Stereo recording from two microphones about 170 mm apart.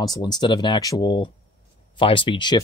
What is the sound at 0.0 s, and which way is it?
Speech, 25° left (ahead or behind).